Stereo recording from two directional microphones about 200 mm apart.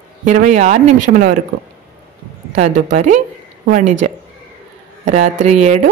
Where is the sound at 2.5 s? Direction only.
35° right (ahead or behind).